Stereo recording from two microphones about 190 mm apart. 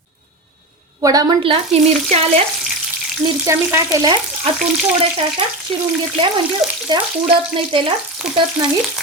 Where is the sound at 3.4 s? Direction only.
15° right (ahead or behind).